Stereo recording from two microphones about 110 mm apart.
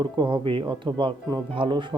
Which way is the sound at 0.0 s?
45° right (ahead or behind).